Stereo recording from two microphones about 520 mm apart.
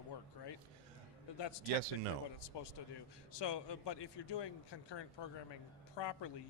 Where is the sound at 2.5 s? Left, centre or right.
Left.